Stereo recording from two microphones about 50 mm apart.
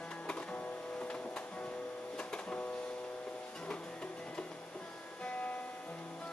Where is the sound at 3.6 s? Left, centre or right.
Left.